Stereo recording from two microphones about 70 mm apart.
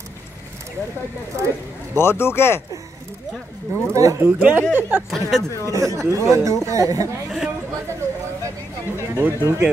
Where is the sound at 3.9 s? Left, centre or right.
Right.